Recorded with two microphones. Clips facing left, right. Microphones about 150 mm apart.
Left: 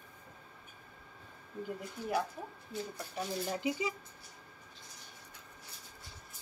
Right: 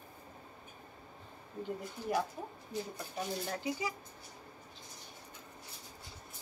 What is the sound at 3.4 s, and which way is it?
Speech, 15° left (ahead or behind).